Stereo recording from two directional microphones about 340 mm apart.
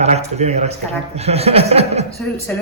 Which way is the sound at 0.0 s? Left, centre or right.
Centre.